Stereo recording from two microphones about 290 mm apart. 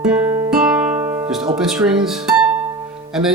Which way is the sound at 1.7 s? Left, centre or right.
Centre.